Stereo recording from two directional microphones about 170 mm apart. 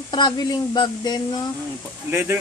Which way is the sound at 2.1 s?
15° right (ahead or behind).